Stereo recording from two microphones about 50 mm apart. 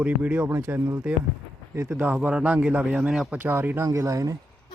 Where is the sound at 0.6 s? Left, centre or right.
Right.